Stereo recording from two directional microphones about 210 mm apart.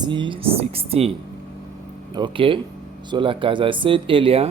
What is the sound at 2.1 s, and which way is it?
Speech, 20° right (ahead or behind).